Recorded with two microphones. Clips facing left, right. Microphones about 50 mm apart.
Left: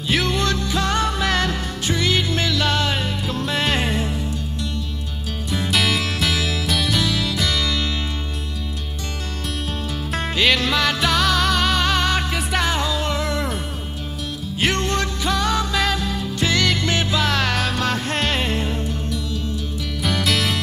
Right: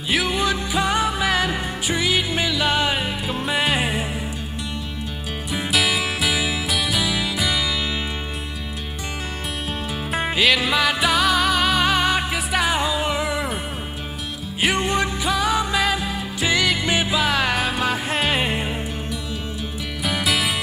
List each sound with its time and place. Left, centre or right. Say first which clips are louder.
0.1 s music: even; centre
5.7 s music: even; centre
10.1 s music: even; centre
14.6 s music: right 1 dB; centre